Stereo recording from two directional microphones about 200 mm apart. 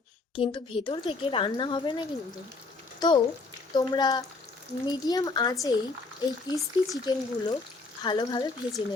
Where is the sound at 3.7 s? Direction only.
20° left (ahead or behind).